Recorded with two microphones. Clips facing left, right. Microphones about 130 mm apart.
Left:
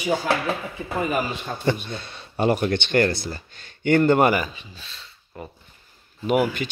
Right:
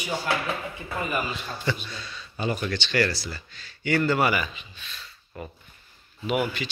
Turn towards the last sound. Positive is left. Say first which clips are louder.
# left 5 dB
turn(degrees=45)  # may be behind; listen again after turning